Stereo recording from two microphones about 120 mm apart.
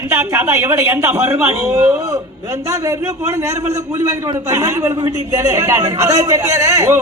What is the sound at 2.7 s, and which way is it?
A man's voice, 25° right (ahead or behind).